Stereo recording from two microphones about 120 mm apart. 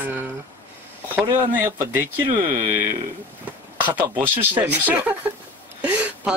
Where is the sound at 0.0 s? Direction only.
15° right (ahead or behind).